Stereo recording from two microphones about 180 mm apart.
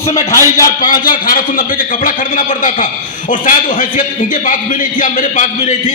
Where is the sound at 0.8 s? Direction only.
50° left (ahead or behind).